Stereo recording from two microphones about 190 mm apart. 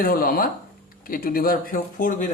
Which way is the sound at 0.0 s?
50° left (ahead or behind).